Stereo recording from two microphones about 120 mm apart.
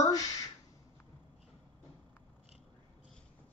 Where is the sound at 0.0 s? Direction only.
30° left (ahead or behind).